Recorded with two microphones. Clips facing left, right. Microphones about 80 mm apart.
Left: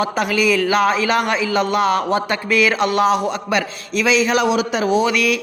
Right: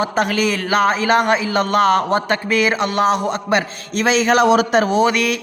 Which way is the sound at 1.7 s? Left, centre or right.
Right.